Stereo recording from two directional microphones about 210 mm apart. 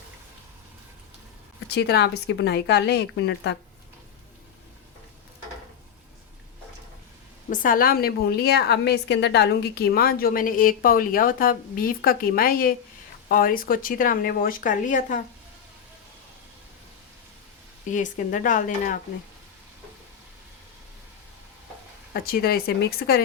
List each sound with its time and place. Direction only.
1.7 s a woman's voice: 50° left (ahead or behind)
7.5 s a woman's voice: 40° left (ahead or behind)
17.9 s speech: 40° left (ahead or behind)
22.1 s a woman's voice: 45° left (ahead or behind)